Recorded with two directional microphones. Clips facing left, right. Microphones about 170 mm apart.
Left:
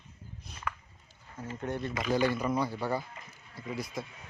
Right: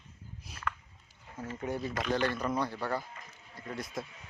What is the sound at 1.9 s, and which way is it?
Speech, 5° left (ahead or behind).